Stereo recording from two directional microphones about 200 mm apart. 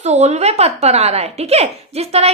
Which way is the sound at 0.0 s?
35° right (ahead or behind).